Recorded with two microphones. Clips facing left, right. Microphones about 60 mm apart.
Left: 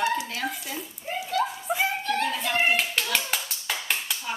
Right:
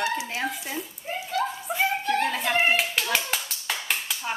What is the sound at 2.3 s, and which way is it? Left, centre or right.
Hands, right.